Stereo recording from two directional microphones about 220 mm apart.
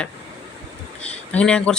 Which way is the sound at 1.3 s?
5° left (ahead or behind).